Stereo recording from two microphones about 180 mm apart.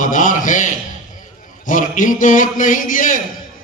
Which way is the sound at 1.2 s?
45° left (ahead or behind).